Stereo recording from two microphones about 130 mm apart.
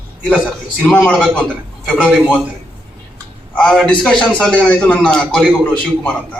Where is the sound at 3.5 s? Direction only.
10° left (ahead or behind).